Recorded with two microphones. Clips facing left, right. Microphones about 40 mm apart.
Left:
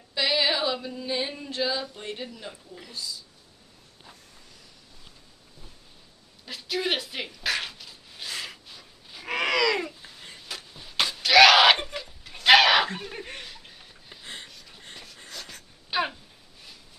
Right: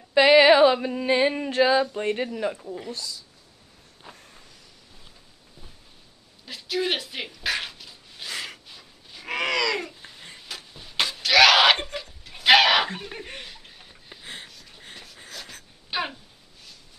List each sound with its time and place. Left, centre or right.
0.1 s a sound: right
2.9 s speech: right
4.1 s vehicle: right
6.4 s dog: centre
8.6 s babbling: centre
10.0 s a sound: centre